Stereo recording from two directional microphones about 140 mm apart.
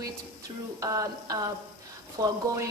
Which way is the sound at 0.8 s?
25° right (ahead or behind).